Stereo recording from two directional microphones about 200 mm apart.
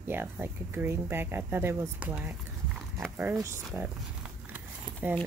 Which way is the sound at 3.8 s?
10° right (ahead or behind).